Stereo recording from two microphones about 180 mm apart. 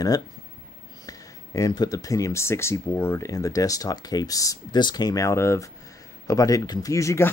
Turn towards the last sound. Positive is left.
turn(degrees=15)  # may be behind; listen again after turning